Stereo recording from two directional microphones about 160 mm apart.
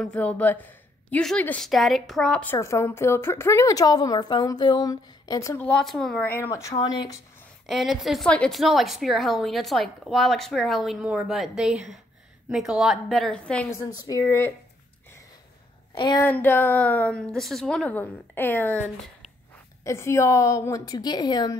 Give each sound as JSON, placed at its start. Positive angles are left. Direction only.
{"t": 0.0, "sound": "a woman's voice", "side_deg": 10}
{"t": 2.5, "sound": "a woman's voice", "side_deg": 15}
{"t": 6.2, "sound": "a woman's voice", "side_deg": 15}
{"t": 7.6, "sound": "a woman's voice", "side_deg": 0}
{"t": 13.9, "sound": "a woman's voice", "side_deg": 25}
{"t": 15.9, "sound": "speech", "side_deg": 25}
{"t": 16.3, "sound": "a woman's voice", "side_deg": 15}
{"t": 19.8, "sound": "a woman's voice", "side_deg": 20}